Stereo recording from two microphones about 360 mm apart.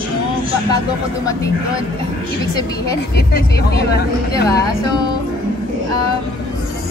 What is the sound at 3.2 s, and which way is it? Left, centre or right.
Speech, left.